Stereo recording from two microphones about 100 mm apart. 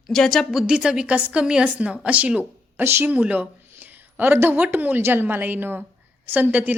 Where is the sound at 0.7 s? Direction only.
5° right (ahead or behind).